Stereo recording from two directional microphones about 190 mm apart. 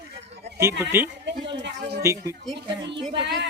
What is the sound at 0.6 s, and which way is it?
Speech, 10° right (ahead or behind).